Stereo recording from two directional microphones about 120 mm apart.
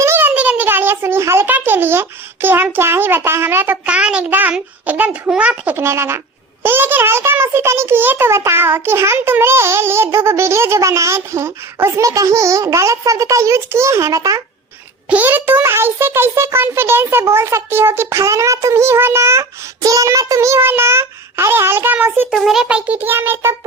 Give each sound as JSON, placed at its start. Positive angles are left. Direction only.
{"t": 0.0, "sound": "a child's voice", "side_deg": -20}
{"t": 15.1, "sound": "a child's voice", "side_deg": -15}
{"t": 22.3, "sound": "a sound", "side_deg": -5}